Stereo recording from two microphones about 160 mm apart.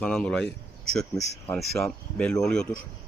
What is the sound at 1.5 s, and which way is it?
Speech, 5° left (ahead or behind).